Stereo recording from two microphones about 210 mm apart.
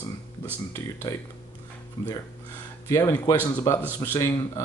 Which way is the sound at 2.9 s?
10° left (ahead or behind).